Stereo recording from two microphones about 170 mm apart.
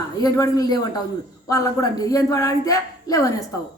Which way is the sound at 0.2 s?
20° left (ahead or behind).